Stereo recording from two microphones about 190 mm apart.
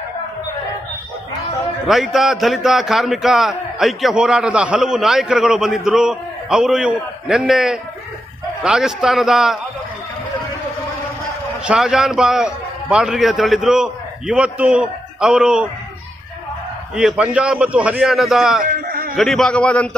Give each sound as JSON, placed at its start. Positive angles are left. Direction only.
{"t": 1.9, "sound": "a man's voice", "side_deg": 0}
{"t": 11.6, "sound": "a man's voice", "side_deg": -5}
{"t": 16.9, "sound": "a man's voice", "side_deg": -5}
{"t": 18.7, "sound": "a sound", "side_deg": -50}
{"t": 19.1, "sound": "a man's voice", "side_deg": 0}